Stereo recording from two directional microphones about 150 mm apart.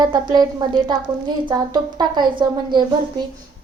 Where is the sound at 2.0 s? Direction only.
30° right (ahead or behind).